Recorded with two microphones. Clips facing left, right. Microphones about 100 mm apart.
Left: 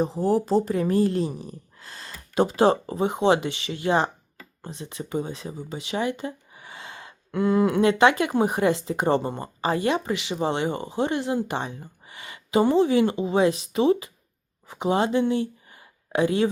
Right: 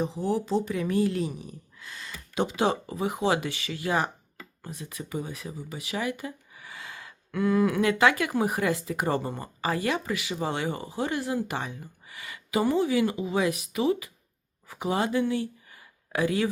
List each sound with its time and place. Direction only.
0.0 s speech: 40° left (ahead or behind)